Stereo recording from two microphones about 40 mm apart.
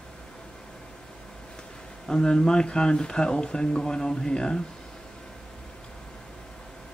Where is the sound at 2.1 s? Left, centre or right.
Centre.